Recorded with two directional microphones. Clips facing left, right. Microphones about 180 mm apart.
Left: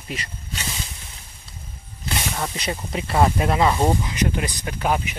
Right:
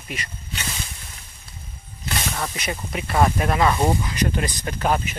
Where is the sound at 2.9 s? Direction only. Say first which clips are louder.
Left 1 dB; 25° left (ahead or behind).